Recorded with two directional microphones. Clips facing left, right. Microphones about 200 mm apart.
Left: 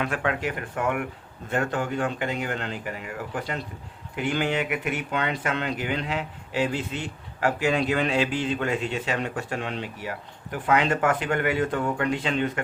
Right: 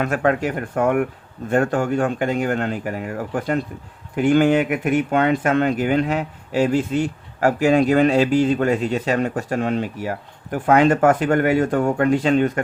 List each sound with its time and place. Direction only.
0.0 s speech: 45° right (ahead or behind)